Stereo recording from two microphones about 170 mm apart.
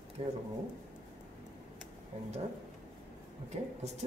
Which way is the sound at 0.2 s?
35° right (ahead or behind).